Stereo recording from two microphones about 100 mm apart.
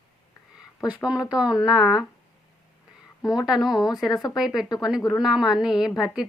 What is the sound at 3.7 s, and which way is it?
Speech, 40° left (ahead or behind).